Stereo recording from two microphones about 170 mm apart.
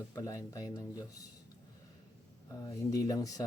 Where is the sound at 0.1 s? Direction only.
20° left (ahead or behind).